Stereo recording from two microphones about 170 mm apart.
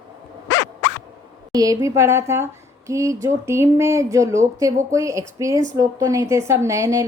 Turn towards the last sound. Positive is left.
turn(degrees=-15)  # may be behind; listen again after turning